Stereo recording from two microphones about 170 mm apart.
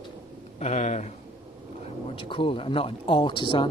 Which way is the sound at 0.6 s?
40° left (ahead or behind).